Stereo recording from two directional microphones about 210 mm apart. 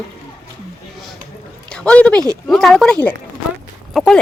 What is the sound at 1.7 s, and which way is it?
Speech, 5° left (ahead or behind).